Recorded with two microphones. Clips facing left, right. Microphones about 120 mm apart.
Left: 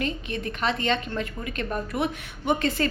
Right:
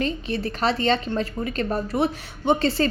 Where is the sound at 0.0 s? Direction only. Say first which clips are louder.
Right 4 dB; 35° right (ahead or behind).